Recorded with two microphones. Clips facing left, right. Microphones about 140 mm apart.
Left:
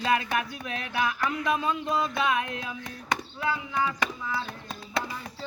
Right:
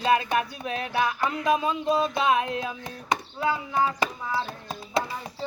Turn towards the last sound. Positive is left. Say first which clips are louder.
# right 3 dB
turn(degrees=-30)  # may be behind; listen again after turning